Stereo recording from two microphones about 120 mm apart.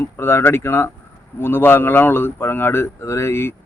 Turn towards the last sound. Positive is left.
turn(degrees=20)  # may be behind; listen again after turning